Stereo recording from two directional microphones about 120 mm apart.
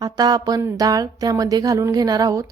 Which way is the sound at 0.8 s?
30° right (ahead or behind).